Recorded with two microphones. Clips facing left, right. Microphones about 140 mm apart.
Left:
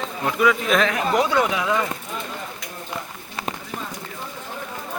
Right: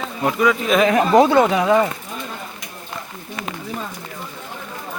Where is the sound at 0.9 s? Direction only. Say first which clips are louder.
Right 7 dB; 30° right (ahead or behind).